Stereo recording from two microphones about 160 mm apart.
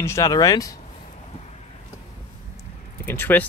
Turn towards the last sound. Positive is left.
turn(degrees=10)  # may be behind; listen again after turning